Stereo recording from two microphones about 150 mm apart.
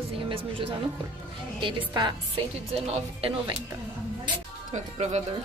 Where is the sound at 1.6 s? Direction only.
35° right (ahead or behind).